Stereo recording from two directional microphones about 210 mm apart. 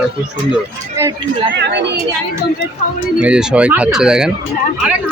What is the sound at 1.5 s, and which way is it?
Speech, 55° right (ahead or behind).